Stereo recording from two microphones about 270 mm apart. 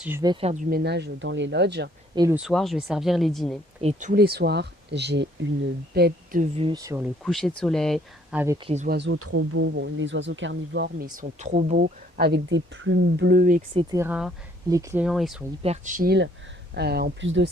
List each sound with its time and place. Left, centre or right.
0.0 s speech: centre; by 1.9 s right
2.1 s speech: centre
2.4 s speech: centre
3.8 s speech: right
7.3 s speech: centre
8.6 s speech: right
9.0 s speech: right
13.7 s speech: centre
15.6 s speech: right